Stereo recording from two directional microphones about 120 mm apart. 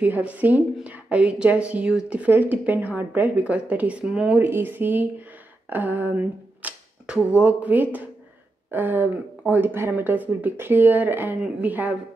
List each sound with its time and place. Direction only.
0.0 s speech: 15° right (ahead or behind)